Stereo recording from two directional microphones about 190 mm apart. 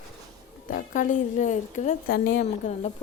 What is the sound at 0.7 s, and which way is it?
A woman's voice, 45° left (ahead or behind).